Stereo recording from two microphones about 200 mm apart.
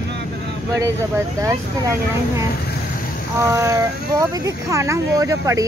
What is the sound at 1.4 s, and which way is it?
Speech, 15° right (ahead or behind).